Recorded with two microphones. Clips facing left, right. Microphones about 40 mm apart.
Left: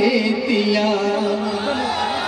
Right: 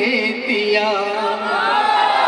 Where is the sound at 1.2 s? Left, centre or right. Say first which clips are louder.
Right 3 dB; right.